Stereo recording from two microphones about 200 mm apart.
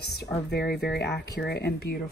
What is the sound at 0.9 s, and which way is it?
Speech, 55° left (ahead or behind).